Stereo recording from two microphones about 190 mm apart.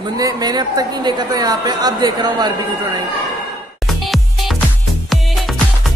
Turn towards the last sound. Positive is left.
turn(degrees=0)  # may be behind; listen again after turning